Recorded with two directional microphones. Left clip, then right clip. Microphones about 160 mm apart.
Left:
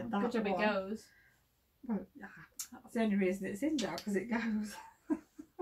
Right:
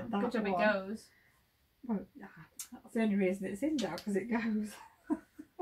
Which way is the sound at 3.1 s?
15° left (ahead or behind).